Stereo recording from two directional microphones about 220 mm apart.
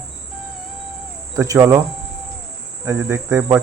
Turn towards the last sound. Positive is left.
turn(degrees=-10)  # may be behind; listen again after turning